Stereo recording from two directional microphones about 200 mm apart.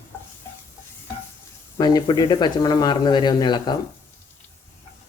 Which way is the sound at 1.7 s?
20° left (ahead or behind).